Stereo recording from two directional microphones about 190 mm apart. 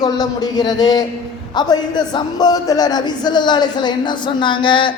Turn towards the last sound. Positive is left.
turn(degrees=25)  # may be behind; listen again after turning